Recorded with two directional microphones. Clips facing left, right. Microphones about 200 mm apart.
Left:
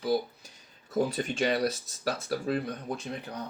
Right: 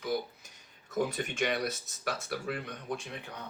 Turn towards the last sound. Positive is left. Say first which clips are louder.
# left 3 dB
turn(degrees=40)  # may be behind; listen again after turning